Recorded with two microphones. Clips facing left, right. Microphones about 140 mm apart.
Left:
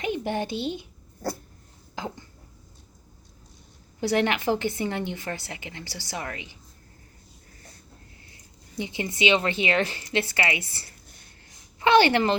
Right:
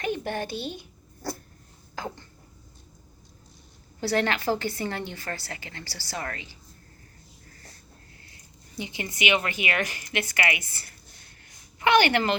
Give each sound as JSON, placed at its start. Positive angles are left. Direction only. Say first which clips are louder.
{"t": 0.0, "sound": "a child's voice", "louder": "left 2 dB", "side_deg": 20}
{"t": 2.0, "sound": "dishes", "louder": "left 1 dB", "side_deg": 15}
{"t": 4.0, "sound": "a woman's voice", "louder": "left 2 dB", "side_deg": 15}
{"t": 8.8, "sound": "a woman's voice", "louder": "left 4 dB", "side_deg": 20}